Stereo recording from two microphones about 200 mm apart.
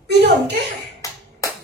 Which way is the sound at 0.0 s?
55° right (ahead or behind).